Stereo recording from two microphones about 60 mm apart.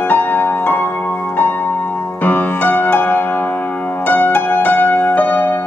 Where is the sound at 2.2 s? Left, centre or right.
Left.